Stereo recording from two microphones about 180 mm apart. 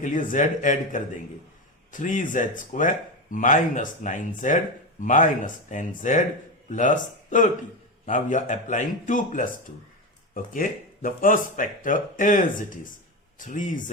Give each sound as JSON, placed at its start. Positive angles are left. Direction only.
{"t": 0.0, "sound": "speech", "side_deg": 45}